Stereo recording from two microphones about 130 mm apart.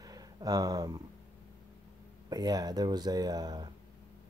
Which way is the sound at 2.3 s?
30° right (ahead or behind).